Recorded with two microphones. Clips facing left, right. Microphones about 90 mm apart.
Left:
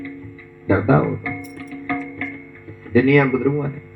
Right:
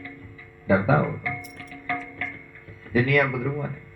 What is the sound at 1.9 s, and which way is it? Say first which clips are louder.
Music: left 5 dB; centre (ahead or behind).